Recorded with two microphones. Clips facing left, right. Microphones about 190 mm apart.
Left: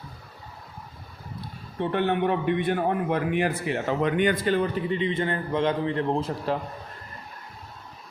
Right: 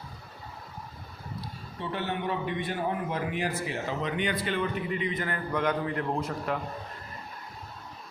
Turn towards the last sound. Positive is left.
turn(degrees=30)  # may be behind; listen again after turning